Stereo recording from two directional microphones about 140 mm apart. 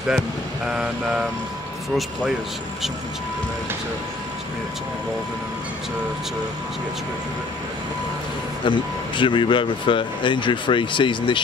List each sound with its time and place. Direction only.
0.7 s vehicle: 5° right (ahead or behind)
8.6 s speech: 35° left (ahead or behind)